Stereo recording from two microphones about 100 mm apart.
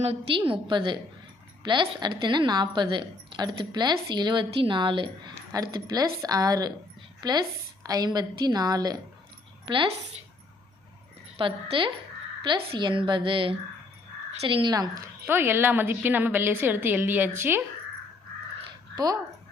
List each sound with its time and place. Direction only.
0.0 s a woman's voice: 75° right (ahead or behind); by 5.3 s 55° right (ahead or behind)
5.5 s a woman's voice: 40° right (ahead or behind)
11.3 s a woman's voice: 60° right (ahead or behind)
14.7 s a woman's voice: 35° right (ahead or behind)
15.3 s a woman's voice: 20° right (ahead or behind)
18.9 s a woman's voice: 40° right (ahead or behind)